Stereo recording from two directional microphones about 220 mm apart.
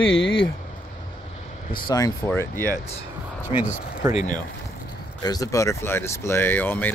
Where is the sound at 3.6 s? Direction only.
35° left (ahead or behind).